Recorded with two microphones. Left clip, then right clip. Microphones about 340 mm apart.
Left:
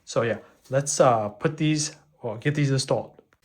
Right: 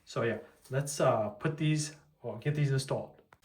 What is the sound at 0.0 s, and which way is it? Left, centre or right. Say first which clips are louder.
Speech: left 8 dB; centre.